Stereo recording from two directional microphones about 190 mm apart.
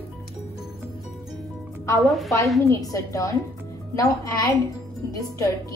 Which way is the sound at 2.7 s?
15° left (ahead or behind).